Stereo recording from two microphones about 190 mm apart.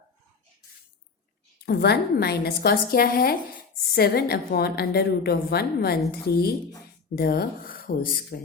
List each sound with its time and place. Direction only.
1.6 s a woman's voice: 55° left (ahead or behind)